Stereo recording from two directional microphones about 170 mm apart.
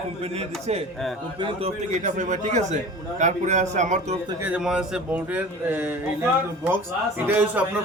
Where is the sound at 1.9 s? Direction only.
45° right (ahead or behind).